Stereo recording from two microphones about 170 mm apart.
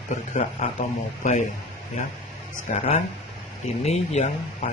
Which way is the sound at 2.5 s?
45° left (ahead or behind).